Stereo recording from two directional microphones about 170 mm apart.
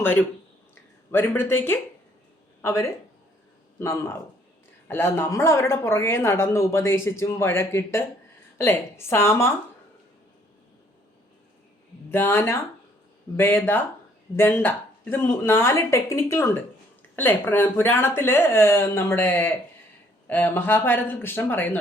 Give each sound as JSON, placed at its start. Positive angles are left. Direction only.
{"t": 0.0, "sound": "speech", "side_deg": 10}
{"t": 12.1, "sound": "speech", "side_deg": 15}